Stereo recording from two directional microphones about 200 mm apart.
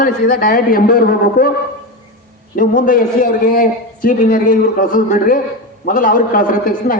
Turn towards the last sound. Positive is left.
turn(degrees=45)  # may be behind; listen again after turning